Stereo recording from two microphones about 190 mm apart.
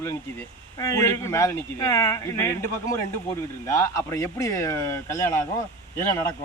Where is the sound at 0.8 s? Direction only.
15° left (ahead or behind).